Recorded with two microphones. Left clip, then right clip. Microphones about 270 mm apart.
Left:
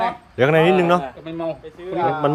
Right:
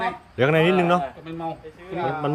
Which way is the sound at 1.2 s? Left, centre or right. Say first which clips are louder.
Left 5 dB; centre.